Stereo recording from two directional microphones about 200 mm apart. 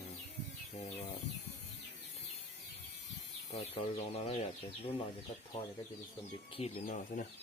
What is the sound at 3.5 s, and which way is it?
Speech, 30° left (ahead or behind).